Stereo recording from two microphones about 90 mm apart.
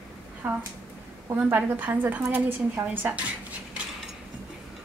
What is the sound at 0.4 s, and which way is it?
A woman's voice, 15° right (ahead or behind).